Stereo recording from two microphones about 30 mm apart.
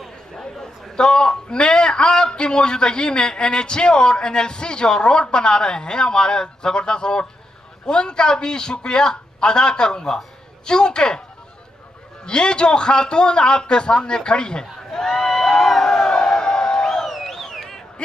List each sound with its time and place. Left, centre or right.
0.9 s a man's voice: left
12.3 s a man's voice: left; by 16.1 s centre
16.1 s crowd: left
17.0 s a sound: centre